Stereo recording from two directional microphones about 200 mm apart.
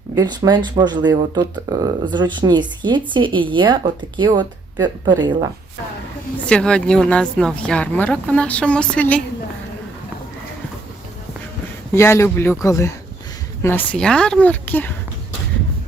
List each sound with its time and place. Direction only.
0.2 s speech: 20° right (ahead or behind)
6.4 s speech: 5° left (ahead or behind)
11.9 s speech: 15° left (ahead or behind)